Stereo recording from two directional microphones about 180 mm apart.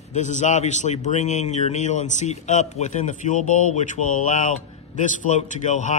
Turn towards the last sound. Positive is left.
turn(degrees=45)  # may be behind; listen again after turning